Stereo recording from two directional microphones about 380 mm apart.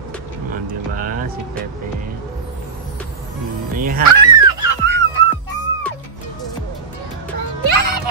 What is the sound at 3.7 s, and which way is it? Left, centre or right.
Music, right.